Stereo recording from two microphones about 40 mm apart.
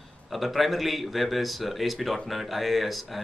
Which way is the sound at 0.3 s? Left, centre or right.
Centre.